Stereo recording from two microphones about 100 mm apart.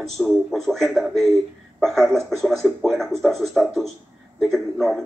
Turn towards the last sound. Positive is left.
turn(degrees=0)  # may be behind; listen again after turning